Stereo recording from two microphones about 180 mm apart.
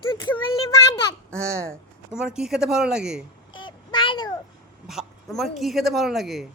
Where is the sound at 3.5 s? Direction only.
25° left (ahead or behind).